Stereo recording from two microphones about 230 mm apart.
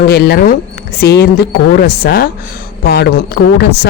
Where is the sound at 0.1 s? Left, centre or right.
Left.